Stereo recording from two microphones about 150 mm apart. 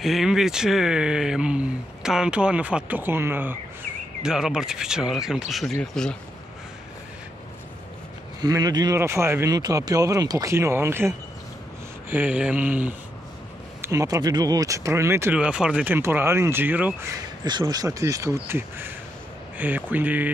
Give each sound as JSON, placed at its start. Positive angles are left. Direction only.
{"t": 0.0, "sound": "speech", "side_deg": 0}
{"t": 8.4, "sound": "speech", "side_deg": -25}
{"t": 13.7, "sound": "speech", "side_deg": -20}
{"t": 17.1, "sound": "speech", "side_deg": -25}